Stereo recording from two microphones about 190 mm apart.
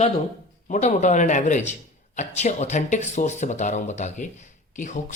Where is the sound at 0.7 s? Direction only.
35° left (ahead or behind).